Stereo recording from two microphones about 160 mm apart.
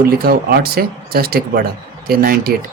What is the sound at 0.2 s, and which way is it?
Speech, 80° right.